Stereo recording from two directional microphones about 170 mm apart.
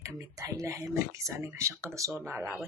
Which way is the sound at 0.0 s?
20° right (ahead or behind).